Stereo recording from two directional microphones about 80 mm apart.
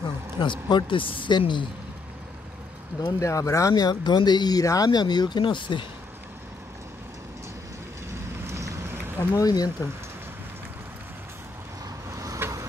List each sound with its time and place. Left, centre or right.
0.4 s speech: left
3.2 s speech: left
8.5 s vehicle: right
9.3 s speech: left
12.1 s vehicle: right